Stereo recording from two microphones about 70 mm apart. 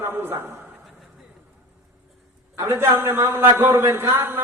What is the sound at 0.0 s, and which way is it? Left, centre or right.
Speech, right.